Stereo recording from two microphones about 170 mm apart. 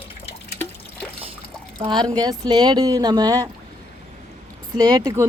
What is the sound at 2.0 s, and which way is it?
Speech, 25° right (ahead or behind).